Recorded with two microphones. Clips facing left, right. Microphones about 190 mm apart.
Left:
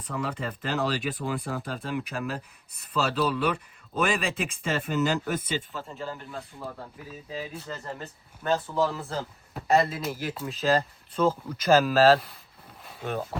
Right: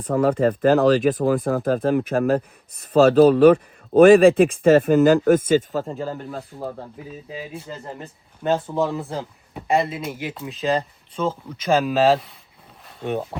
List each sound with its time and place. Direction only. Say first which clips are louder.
0.0 s speech: right 14 dB; 50° right (ahead or behind)
8.4 s speech: right 4 dB; 25° right (ahead or behind)
9.6 s speech: right 2 dB; centre (ahead or behind)
12.8 s a sound: right 6 dB; centre (ahead or behind)